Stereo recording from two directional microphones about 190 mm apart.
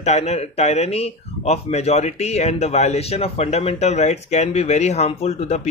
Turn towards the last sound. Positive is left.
turn(degrees=35)  # may be behind; listen again after turning